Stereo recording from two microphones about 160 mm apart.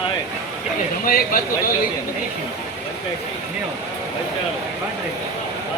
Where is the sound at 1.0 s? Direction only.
60° left (ahead or behind).